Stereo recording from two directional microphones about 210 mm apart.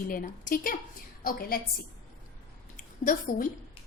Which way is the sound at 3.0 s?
40° left (ahead or behind).